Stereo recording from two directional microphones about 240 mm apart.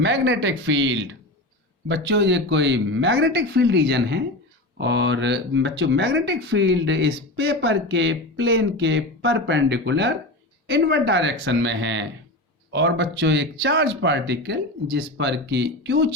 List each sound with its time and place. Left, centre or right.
0.0 s speech: right